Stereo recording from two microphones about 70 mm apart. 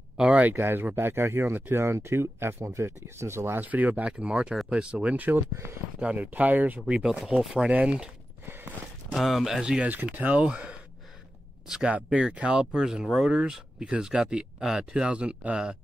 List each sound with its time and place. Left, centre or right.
0.2 s speech: right
3.6 s speech: right
5.5 s speech: right
5.9 s speech: right
7.0 s speech: centre
9.1 s speech: centre